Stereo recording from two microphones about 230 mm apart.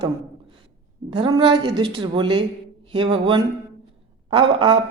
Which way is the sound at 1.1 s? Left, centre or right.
Right.